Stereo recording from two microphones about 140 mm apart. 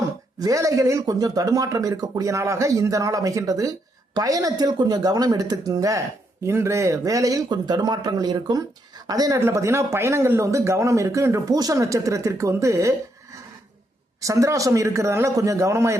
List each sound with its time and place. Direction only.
0.3 s speech: 25° right (ahead or behind)
14.2 s speech: 20° right (ahead or behind)